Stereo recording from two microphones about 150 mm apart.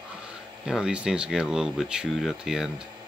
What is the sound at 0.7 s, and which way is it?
Speech, 5° right (ahead or behind).